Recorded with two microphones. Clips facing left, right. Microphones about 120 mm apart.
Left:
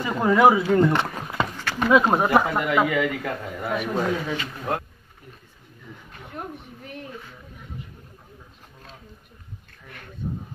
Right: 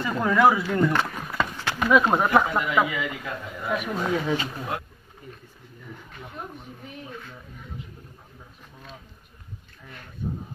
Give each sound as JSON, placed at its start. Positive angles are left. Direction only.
{"t": 0.0, "sound": "speech", "side_deg": 15}
{"t": 1.6, "sound": "a sound", "side_deg": -15}
{"t": 1.9, "sound": "speech", "side_deg": 15}
{"t": 2.9, "sound": "a man's voice", "side_deg": 55}
{"t": 3.7, "sound": "speech", "side_deg": -5}